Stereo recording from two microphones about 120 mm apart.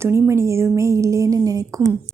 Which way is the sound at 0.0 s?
20° right (ahead or behind).